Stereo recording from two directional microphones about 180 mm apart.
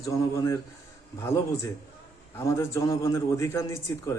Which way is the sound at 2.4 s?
15° left (ahead or behind).